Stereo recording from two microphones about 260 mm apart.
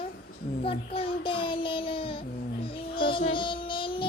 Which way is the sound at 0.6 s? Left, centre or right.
Left.